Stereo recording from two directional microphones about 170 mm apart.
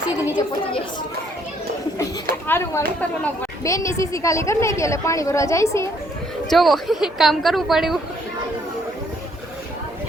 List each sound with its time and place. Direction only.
2.5 s a woman's voice: 15° left (ahead or behind)
6.5 s a woman's voice: centre (ahead or behind)